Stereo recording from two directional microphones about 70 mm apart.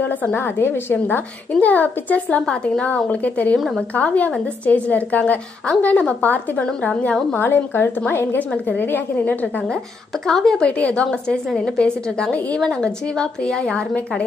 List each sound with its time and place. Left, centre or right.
0.0 s a woman's voice: left
3.5 s a woman's voice: centre
3.9 s a woman's voice: left
7.3 s a woman's voice: left
10.2 s a woman's voice: centre